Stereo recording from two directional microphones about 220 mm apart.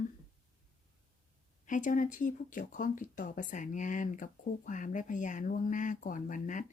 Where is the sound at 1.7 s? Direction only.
35° left (ahead or behind).